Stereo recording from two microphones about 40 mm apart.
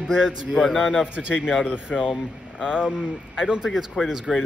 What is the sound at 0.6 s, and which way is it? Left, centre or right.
Speech, centre.